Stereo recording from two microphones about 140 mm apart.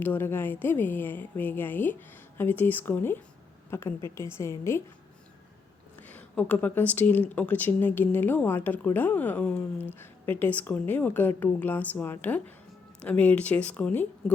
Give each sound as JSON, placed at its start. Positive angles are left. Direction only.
{"t": 0.0, "sound": "a woman's voice", "side_deg": 15}
{"t": 6.0, "sound": "speech", "side_deg": 10}